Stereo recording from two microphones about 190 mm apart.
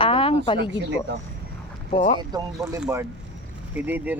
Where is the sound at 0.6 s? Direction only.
70° right (ahead or behind).